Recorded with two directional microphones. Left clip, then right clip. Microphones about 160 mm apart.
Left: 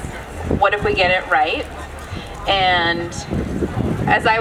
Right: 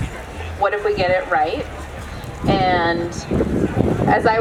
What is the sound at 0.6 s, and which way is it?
Speech, 25° left (ahead or behind).